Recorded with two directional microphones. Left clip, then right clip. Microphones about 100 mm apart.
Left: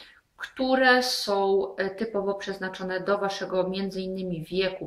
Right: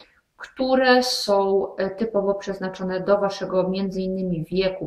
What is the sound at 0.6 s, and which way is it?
Speech, 20° left (ahead or behind).